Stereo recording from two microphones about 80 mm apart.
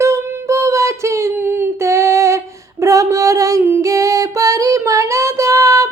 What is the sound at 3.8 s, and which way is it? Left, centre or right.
Music, right.